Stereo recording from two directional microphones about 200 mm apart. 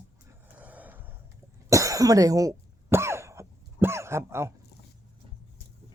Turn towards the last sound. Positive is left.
turn(degrees=-15)  # may be behind; listen again after turning